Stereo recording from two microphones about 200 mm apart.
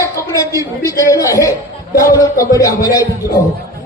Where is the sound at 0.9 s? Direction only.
15° left (ahead or behind).